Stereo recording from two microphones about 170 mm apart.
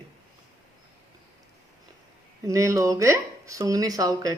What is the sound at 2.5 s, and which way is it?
A woman's voice, 20° right (ahead or behind).